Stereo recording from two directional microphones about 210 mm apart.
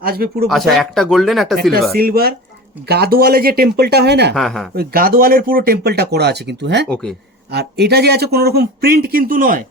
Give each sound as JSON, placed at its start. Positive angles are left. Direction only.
{"t": 0.0, "sound": "speech", "side_deg": -45}
{"t": 0.5, "sound": "speech", "side_deg": 0}
{"t": 2.0, "sound": "speech", "side_deg": -45}
{"t": 4.4, "sound": "speech", "side_deg": 0}
{"t": 4.7, "sound": "speech", "side_deg": -45}
{"t": 6.8, "sound": "speech", "side_deg": 5}
{"t": 7.5, "sound": "speech", "side_deg": -50}